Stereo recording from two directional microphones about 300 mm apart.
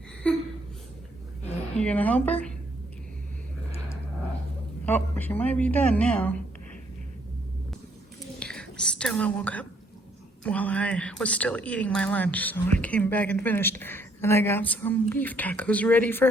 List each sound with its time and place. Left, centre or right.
0.2 s a woman's voice: centre
1.8 s a woman's voice: centre
4.9 s a woman's voice: centre
8.4 s a woman's voice: centre